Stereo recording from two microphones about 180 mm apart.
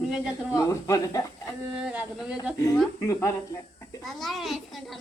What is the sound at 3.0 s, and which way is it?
Speech, 15° left (ahead or behind).